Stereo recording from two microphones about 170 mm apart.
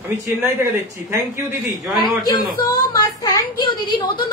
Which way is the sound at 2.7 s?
25° left (ahead or behind).